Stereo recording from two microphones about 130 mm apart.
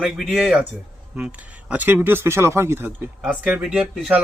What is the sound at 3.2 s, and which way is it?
Speech, 5° right (ahead or behind).